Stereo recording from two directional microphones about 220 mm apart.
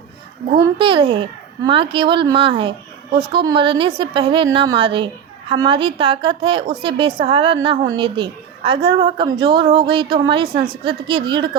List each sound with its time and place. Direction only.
0.5 s a woman's voice: 20° right (ahead or behind)